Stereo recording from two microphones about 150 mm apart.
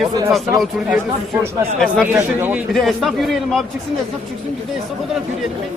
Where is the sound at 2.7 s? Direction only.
Centre (ahead or behind).